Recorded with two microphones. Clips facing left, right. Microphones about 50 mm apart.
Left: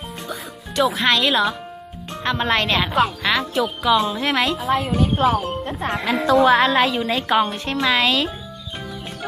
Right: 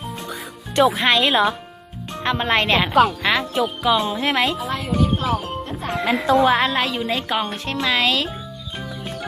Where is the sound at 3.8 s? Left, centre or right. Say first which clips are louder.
Left 2 dB; centre.